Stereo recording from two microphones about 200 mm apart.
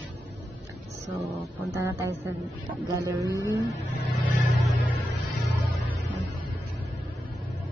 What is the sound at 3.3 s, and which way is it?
Speech, 15° left (ahead or behind).